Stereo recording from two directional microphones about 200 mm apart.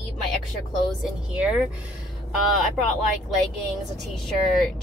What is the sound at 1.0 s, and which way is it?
Speech, 5° right (ahead or behind).